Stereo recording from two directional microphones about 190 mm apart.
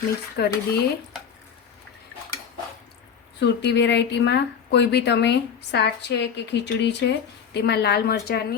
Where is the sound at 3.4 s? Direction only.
65° left (ahead or behind).